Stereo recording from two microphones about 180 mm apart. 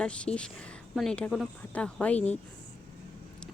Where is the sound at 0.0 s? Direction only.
5° left (ahead or behind).